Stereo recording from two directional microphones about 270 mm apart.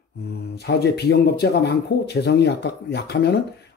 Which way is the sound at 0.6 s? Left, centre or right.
Left.